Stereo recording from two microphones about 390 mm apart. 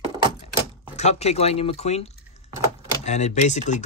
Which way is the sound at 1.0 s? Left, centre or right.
Centre.